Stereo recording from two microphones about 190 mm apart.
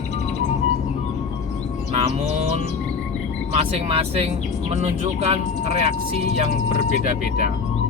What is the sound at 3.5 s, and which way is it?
Speech, 30° right (ahead or behind).